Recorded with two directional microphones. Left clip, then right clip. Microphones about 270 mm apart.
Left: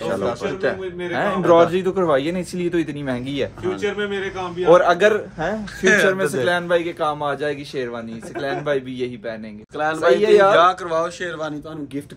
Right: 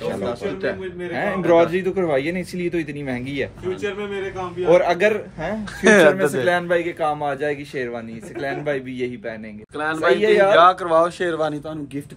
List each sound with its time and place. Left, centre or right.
1.1 s a man's voice: centre
4.6 s a man's voice: centre
5.8 s speech: centre
6.1 s a man's voice: centre
11.1 s speech: right